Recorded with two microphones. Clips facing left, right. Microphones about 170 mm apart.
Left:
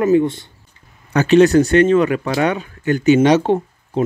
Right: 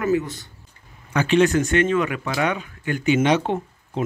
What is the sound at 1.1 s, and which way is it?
Speech, 40° left (ahead or behind).